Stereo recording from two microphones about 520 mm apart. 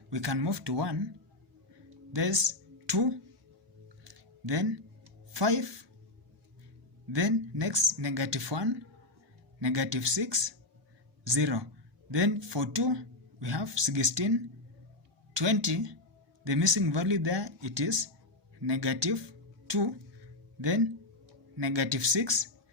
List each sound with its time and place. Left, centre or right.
0.1 s speech: right
2.1 s speech: right
4.1 s a sound: right
5.3 s speech: right
7.1 s speech: right
19.7 s a sound: right
21.5 s speech: right